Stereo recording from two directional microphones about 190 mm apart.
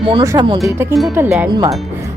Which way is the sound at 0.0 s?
25° right (ahead or behind).